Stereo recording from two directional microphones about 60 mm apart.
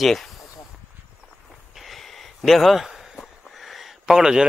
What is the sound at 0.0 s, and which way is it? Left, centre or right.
Speech, centre.